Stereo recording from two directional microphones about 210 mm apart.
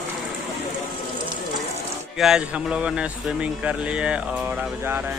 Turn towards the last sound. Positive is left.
turn(degrees=-5)  # may be behind; listen again after turning